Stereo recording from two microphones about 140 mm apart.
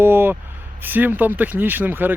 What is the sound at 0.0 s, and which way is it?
Speech, 15° right (ahead or behind).